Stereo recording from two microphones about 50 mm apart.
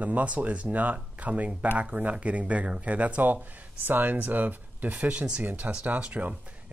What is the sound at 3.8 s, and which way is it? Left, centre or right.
Speech, right.